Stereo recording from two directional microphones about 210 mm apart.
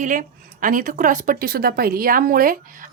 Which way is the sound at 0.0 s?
40° right (ahead or behind).